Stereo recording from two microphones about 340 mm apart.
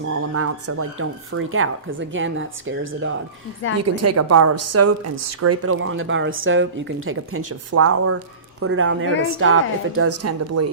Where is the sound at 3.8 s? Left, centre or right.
Right.